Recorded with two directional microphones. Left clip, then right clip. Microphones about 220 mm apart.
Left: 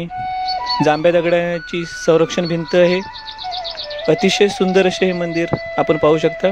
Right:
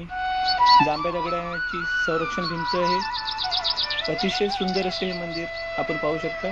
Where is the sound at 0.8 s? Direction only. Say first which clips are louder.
Left 8 dB; 50° left (ahead or behind).